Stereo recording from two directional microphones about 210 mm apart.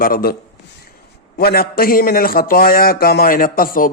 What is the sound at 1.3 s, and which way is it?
A man's voice, 45° left (ahead or behind).